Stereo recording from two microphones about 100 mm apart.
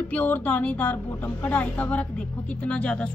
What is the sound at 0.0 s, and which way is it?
A woman's voice, 15° left (ahead or behind).